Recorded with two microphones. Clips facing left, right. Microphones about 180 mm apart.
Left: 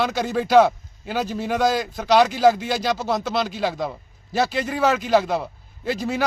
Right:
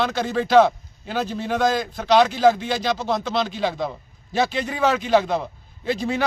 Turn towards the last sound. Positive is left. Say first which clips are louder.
# right 1 dB
turn(degrees=5)  # may be behind; listen again after turning